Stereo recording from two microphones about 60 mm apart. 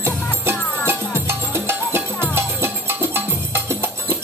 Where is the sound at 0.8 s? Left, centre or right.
Right.